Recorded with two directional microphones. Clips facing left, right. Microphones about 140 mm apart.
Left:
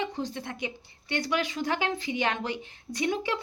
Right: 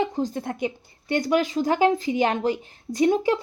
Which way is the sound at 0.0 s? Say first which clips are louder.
Right 7 dB; 45° right (ahead or behind).